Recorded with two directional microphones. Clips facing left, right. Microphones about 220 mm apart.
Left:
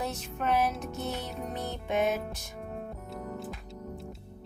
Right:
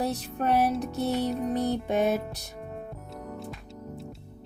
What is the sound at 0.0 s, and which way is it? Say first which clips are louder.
Music: right 5 dB; 35° right (ahead or behind).